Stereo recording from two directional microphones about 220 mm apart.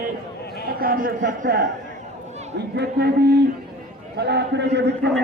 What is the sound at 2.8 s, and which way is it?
A man's voice, 50° right (ahead or behind).